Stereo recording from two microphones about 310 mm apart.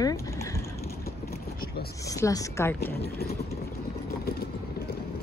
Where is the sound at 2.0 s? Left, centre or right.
Centre.